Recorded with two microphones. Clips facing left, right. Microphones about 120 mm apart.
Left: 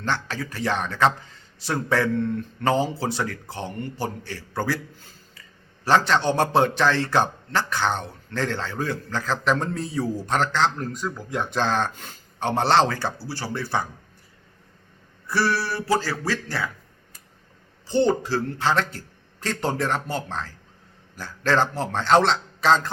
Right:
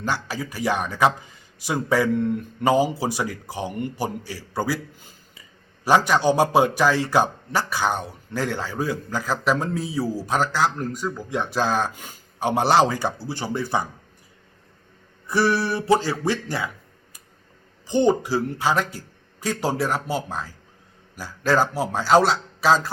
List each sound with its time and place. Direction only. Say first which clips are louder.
0.0 s a man's voice: right 1 dB; 10° right (ahead or behind)
15.3 s a man's voice: right 3 dB; 15° right (ahead or behind)
17.8 s a man's voice: right 2 dB; 15° right (ahead or behind)